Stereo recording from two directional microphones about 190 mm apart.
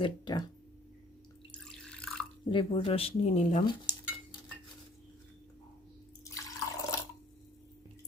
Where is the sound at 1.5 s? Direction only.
5° left (ahead or behind).